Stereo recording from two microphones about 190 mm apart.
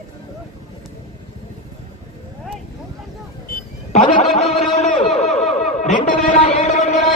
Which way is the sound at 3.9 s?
35° left (ahead or behind).